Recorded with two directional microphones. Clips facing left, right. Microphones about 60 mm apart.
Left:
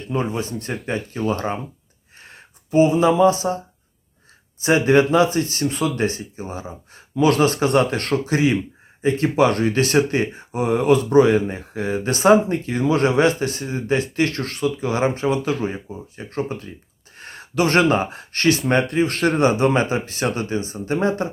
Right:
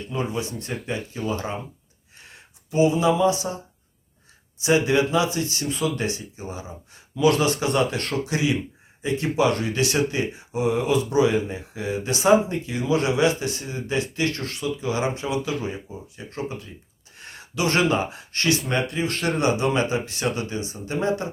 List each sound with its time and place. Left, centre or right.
0.1 s speech: left
4.6 s speech: left
18.7 s speech: left
18.9 s speech: left